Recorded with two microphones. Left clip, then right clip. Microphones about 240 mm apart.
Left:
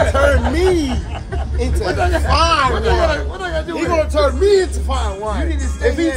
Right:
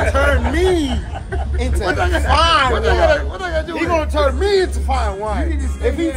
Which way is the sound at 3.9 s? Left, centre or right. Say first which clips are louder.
Left 2 dB; right.